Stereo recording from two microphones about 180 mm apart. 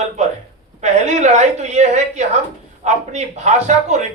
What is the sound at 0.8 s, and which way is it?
A woman's voice, 40° right (ahead or behind).